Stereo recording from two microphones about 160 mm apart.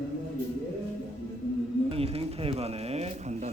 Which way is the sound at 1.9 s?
40° right (ahead or behind).